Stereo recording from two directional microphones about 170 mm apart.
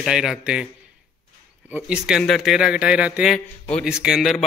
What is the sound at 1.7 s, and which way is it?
Speech, 5° right (ahead or behind).